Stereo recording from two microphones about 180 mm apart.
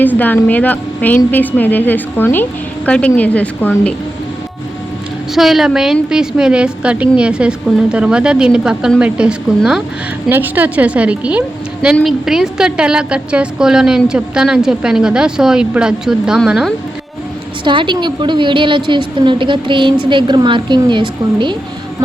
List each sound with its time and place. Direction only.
0.0 s a woman's voice: 10° left (ahead or behind)
5.3 s a woman's voice: centre (ahead or behind)
17.6 s a woman's voice: 25° right (ahead or behind)